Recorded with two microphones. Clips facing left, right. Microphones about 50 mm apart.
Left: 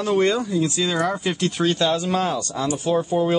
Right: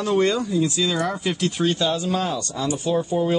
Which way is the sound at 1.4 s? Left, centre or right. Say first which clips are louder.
Left 1 dB; left.